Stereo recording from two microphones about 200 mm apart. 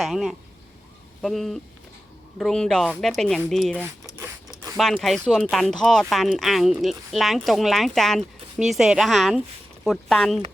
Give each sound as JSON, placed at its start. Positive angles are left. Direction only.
{"t": 0.0, "sound": "speech", "side_deg": 0}
{"t": 3.8, "sound": "zipper", "side_deg": -10}
{"t": 4.8, "sound": "speech", "side_deg": 0}